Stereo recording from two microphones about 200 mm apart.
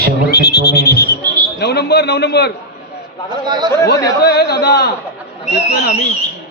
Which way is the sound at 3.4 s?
20° right (ahead or behind).